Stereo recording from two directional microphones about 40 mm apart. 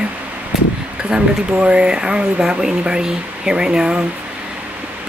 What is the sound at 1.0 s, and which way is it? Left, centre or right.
Speech, right.